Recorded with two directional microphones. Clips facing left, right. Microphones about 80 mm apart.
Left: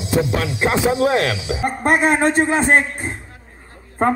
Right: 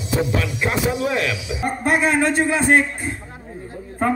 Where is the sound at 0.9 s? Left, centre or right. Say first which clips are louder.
Left 5 dB; left.